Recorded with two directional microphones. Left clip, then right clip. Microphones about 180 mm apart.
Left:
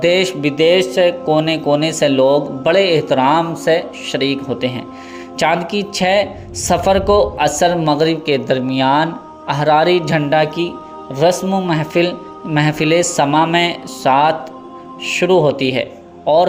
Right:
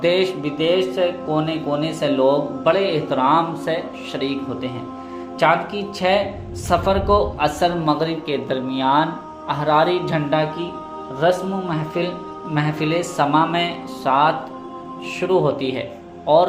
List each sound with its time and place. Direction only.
0.0 s speech: 40° left (ahead or behind)